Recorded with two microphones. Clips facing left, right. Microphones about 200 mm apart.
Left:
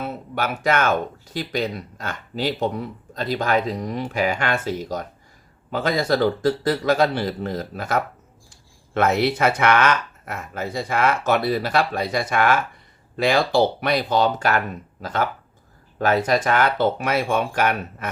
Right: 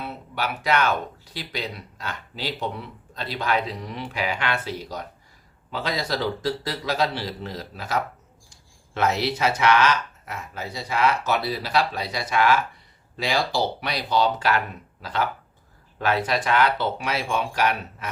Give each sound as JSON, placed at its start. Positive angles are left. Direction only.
{"t": 0.0, "sound": "speech", "side_deg": 45}